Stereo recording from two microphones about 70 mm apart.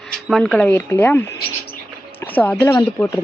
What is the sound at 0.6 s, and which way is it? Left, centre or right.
Speech, left.